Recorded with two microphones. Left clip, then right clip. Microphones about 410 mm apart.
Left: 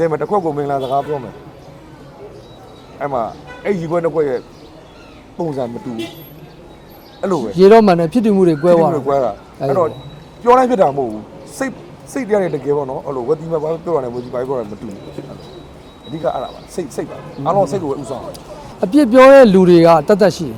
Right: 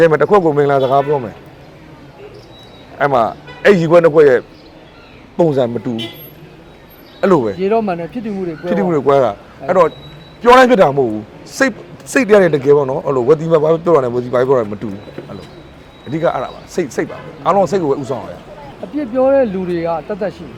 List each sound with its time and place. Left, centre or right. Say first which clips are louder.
0.0 s speech: right 6 dB; right
3.0 s a man's voice: right 7 dB; right
7.2 s a man's voice: right 6 dB; right
7.6 s speech: left 8 dB; left
8.9 s a man's voice: right 4 dB; right
16.2 s speech: right 3 dB; right
18.9 s speech: left 7 dB; left